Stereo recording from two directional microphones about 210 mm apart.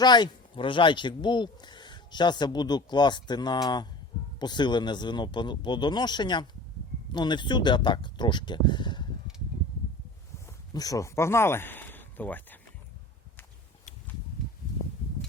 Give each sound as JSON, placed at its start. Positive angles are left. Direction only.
{"t": 0.0, "sound": "speech", "side_deg": 20}
{"t": 10.8, "sound": "speech", "side_deg": 15}